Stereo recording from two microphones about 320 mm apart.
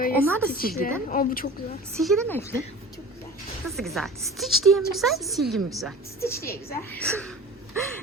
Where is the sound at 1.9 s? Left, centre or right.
Centre.